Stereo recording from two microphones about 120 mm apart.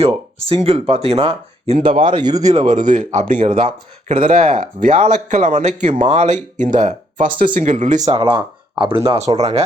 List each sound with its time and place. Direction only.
0.0 s speech: 55° right (ahead or behind)
2.0 s speech: 35° right (ahead or behind)
2.4 s speech: 75° right (ahead or behind)
8.1 s speech: 45° right (ahead or behind)
9.0 s speech: 65° right (ahead or behind)